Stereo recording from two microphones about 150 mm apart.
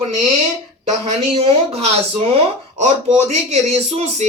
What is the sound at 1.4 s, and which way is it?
Speech, 45° right (ahead or behind).